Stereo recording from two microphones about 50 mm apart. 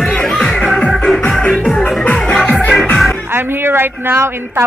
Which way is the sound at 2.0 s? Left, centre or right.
Left.